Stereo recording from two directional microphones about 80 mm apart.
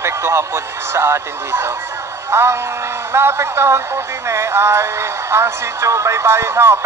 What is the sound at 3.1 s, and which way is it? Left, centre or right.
Speech, right.